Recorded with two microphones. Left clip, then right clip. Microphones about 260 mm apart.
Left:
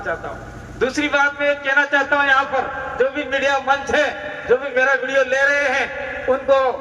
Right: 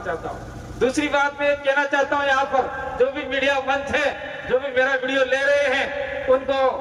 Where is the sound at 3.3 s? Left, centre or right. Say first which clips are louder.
Left 3 dB; centre.